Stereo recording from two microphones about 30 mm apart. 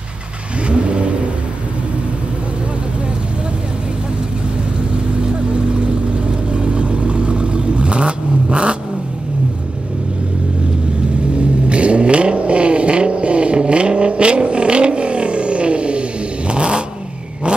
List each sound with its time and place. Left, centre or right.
0.7 s vehicle: right
6.5 s vehicle: right
11.3 s vehicle: right